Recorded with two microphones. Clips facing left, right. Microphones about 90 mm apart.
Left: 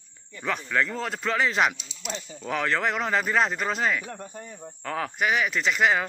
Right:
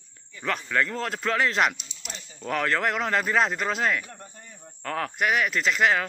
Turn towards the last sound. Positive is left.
turn(degrees=5)  # may be behind; listen again after turning